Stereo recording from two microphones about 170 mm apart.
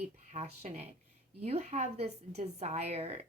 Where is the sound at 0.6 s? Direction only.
40° right (ahead or behind).